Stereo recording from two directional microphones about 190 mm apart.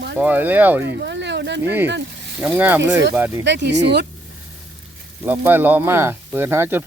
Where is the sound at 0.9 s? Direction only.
65° right (ahead or behind).